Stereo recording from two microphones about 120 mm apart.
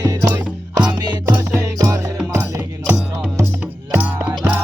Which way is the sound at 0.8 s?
35° right (ahead or behind).